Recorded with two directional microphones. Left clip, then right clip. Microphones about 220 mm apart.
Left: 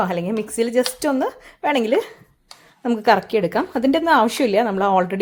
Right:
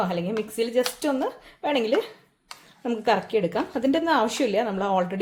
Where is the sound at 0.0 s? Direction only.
30° left (ahead or behind).